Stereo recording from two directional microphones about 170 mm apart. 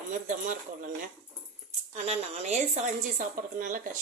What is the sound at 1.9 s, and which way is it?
A woman's voice, 40° right (ahead or behind).